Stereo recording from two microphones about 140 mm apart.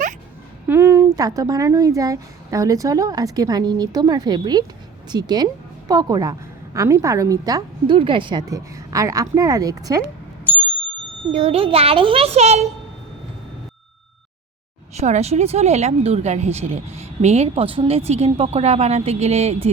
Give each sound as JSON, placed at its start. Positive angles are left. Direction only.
{"t": 0.7, "sound": "a sound", "side_deg": -15}
{"t": 1.4, "sound": "speech", "side_deg": -25}
{"t": 11.3, "sound": "speech", "side_deg": -50}
{"t": 14.9, "sound": "speech", "side_deg": -55}